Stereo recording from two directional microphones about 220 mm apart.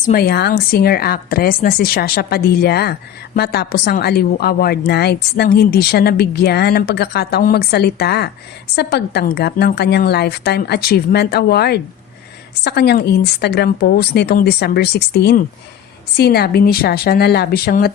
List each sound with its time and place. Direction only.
0.0 s speech: 40° left (ahead or behind)